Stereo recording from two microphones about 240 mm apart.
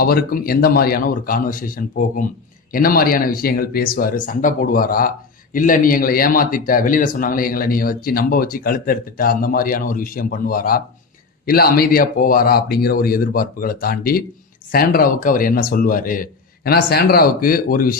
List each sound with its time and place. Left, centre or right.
0.0 s speech: left